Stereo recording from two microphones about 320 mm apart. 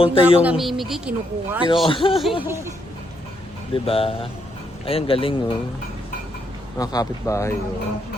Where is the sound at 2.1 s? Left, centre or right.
Centre.